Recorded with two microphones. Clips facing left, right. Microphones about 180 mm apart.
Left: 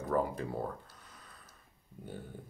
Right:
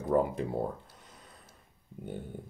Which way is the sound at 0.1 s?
25° right (ahead or behind).